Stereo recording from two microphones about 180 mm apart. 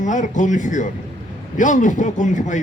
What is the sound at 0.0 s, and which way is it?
A man's voice, 45° left (ahead or behind).